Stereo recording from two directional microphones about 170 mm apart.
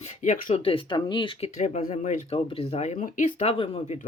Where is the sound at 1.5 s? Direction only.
45° left (ahead or behind).